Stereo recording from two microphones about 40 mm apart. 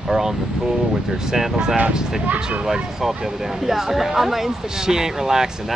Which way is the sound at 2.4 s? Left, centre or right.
Right.